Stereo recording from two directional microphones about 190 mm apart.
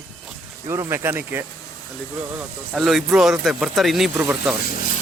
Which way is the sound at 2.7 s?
Centre (ahead or behind).